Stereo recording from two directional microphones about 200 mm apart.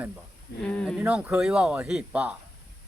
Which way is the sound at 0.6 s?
5° left (ahead or behind).